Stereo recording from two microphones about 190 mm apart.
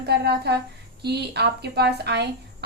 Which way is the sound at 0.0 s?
60° right (ahead or behind).